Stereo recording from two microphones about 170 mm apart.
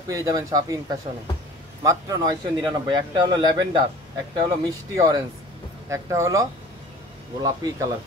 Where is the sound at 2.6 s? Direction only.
25° right (ahead or behind).